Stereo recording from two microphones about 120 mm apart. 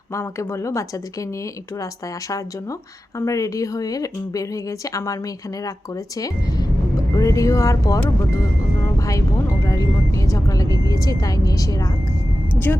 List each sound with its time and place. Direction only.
0.1 s speech: 25° left (ahead or behind)
3.2 s speech: 25° left (ahead or behind)
6.1 s speech: 30° left (ahead or behind)
9.0 s vehicle: 30° left (ahead or behind)
10.2 s speech: 30° left (ahead or behind)